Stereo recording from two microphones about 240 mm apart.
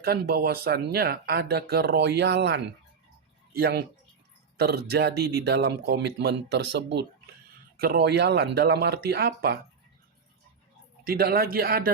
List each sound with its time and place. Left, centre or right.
0.0 s a man's voice: right
11.0 s speech: right